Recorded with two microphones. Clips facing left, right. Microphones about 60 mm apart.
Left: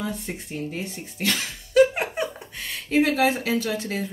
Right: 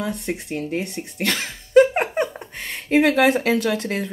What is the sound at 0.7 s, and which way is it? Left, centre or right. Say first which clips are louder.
Speech: right 6 dB; right.